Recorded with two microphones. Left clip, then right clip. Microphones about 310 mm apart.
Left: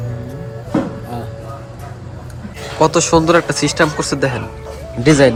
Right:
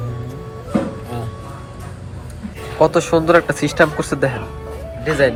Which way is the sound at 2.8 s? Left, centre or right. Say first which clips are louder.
Left 2 dB; centre.